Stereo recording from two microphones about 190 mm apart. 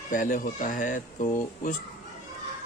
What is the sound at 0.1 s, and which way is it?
Speech, 45° left (ahead or behind).